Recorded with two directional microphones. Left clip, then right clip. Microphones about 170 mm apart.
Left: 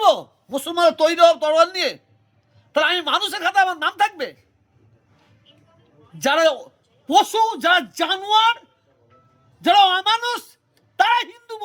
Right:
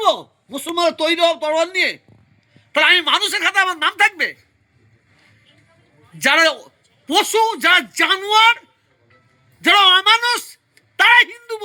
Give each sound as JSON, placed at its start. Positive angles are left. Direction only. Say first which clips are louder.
{"t": 0.0, "sound": "a man's voice", "louder": "left 1 dB", "side_deg": 25}
{"t": 6.1, "sound": "a man's voice", "louder": "right 3 dB", "side_deg": 25}